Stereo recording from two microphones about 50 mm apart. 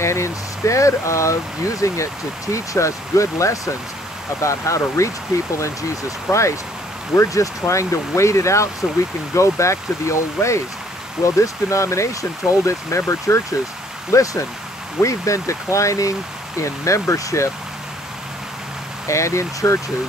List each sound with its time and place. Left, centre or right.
0.0 s speech: left
19.0 s speech: left